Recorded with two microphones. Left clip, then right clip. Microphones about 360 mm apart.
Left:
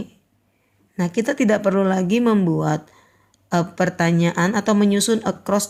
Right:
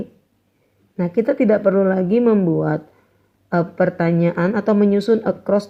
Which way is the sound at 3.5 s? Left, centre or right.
Left.